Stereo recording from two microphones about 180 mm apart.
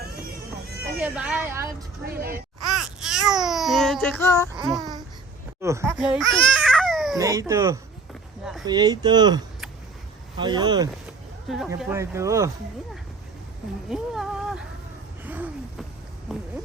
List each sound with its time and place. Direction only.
0.9 s speech: 5° right (ahead or behind)
2.1 s speech: 60° right (ahead or behind)
2.6 s babbling: centre (ahead or behind)
5.6 s speech: 15° right (ahead or behind)
6.0 s baby cry: 5° right (ahead or behind)
7.2 s speech: 15° right (ahead or behind)
11.4 s speech: centre (ahead or behind)
11.9 s speech: 15° right (ahead or behind)
13.9 s speech: 5° right (ahead or behind)
15.2 s gasp: 10° right (ahead or behind)
16.3 s speech: centre (ahead or behind)